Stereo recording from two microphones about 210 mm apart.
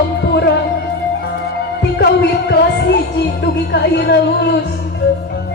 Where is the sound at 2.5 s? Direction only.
50° left (ahead or behind).